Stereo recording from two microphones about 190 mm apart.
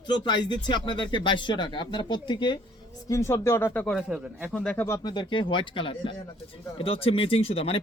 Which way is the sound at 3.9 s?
5° right (ahead or behind).